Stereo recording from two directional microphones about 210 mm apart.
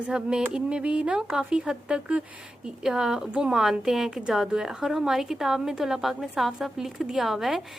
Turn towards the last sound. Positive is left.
turn(degrees=0)  # may be behind; listen again after turning